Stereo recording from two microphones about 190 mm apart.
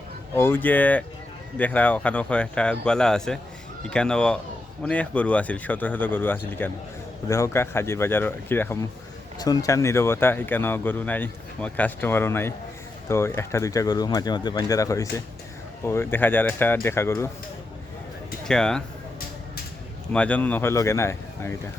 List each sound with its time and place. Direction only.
0.3 s speech: 10° left (ahead or behind)
18.4 s speech: 5° left (ahead or behind)
20.1 s speech: 5° left (ahead or behind)